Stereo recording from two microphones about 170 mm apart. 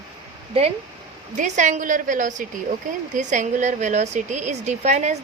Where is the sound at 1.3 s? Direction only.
45° right (ahead or behind).